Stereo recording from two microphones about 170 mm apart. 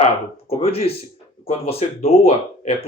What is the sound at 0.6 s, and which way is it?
Speech, 35° left (ahead or behind).